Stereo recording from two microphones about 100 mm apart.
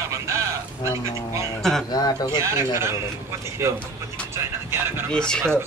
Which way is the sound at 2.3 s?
30° right (ahead or behind).